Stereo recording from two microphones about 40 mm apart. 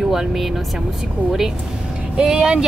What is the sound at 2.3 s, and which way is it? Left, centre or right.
Speech, right.